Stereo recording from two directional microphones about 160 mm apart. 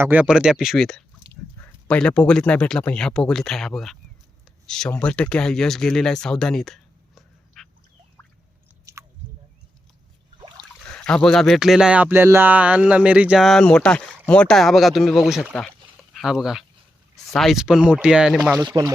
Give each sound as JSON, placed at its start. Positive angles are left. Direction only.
{"t": 0.0, "sound": "speech", "side_deg": -10}
{"t": 7.2, "sound": "a sound", "side_deg": 0}
{"t": 8.9, "sound": "chewing", "side_deg": -20}
{"t": 10.6, "sound": "speech", "side_deg": 5}
{"t": 18.5, "sound": "speech", "side_deg": -20}